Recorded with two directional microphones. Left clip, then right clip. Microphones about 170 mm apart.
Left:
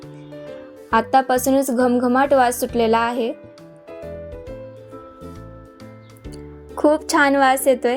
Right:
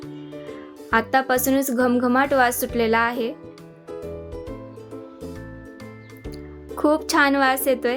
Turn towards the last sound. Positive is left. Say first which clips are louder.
# left 4 dB
turn(degrees=10)  # may be behind; listen again after turning